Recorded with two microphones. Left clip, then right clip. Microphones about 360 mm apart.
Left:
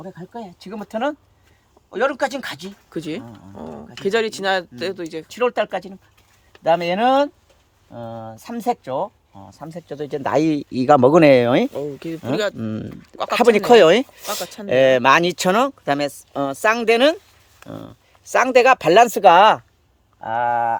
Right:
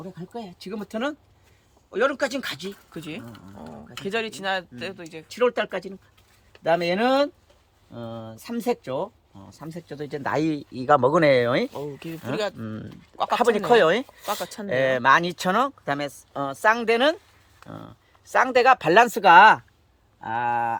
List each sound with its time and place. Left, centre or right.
0.3 s speech: centre
11.7 s speech: centre
12.5 s speech: left